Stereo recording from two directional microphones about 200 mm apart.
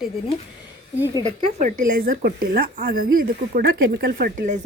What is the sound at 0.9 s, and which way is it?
Speech, 15° right (ahead or behind).